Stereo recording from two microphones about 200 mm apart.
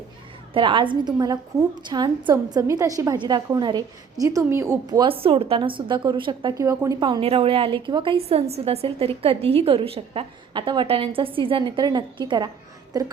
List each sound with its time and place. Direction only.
0.5 s a woman's voice: 25° right (ahead or behind)